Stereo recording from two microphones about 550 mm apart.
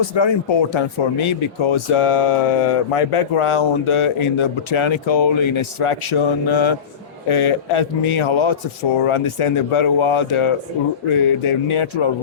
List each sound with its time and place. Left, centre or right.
0.0 s speech: left